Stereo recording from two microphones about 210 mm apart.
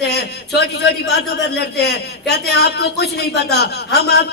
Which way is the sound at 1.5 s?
50° left (ahead or behind).